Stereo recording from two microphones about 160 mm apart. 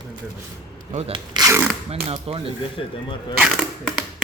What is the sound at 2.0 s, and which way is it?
Speech, 35° right (ahead or behind).